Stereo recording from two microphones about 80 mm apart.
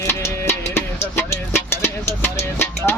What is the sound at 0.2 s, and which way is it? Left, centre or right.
Music, left.